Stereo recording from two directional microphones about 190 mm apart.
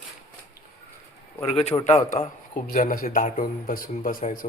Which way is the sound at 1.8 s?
35° left (ahead or behind).